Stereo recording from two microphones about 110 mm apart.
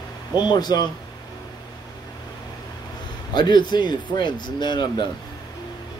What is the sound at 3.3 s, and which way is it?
Speech, 40° left (ahead or behind).